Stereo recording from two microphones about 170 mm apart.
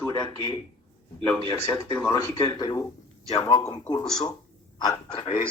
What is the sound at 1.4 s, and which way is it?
Speech, 15° left (ahead or behind).